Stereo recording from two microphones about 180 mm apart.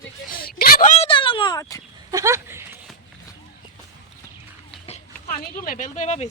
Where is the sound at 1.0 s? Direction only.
30° left (ahead or behind).